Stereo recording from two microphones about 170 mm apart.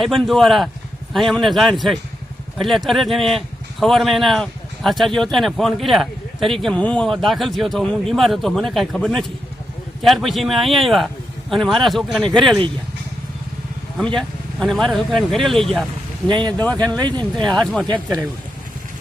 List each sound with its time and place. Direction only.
0.0 s speech: centre (ahead or behind)
14.2 s speech: centre (ahead or behind)
16.3 s speech: 25° right (ahead or behind)
17.4 s speech: 5° left (ahead or behind)